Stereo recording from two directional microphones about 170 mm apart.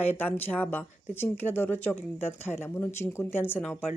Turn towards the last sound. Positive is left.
turn(degrees=10)  # may be behind; listen again after turning